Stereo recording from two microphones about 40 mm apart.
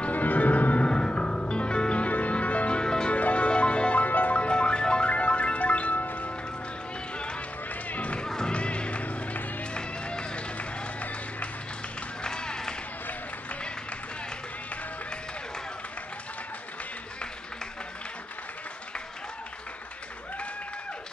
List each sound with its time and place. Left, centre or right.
0.1 s music: left
0.8 s music: left
2.8 s music: left
3.1 s music: left
4.0 s music: left
4.4 s music: left
7.2 s run: left
7.9 s music: left
8.3 s music: centre
8.5 s music: left
9.8 s music: left
12.2 s music: left